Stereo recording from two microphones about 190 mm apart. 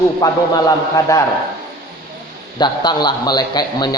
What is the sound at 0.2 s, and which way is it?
A man's voice, 20° left (ahead or behind).